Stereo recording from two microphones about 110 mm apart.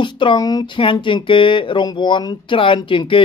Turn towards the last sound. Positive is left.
turn(degrees=50)  # may be behind; listen again after turning